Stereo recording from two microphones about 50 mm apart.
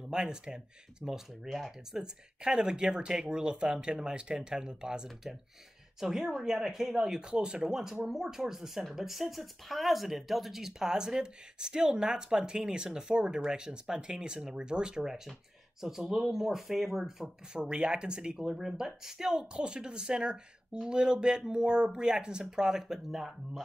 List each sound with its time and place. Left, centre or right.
0.1 s speech: centre
18.4 s speech: centre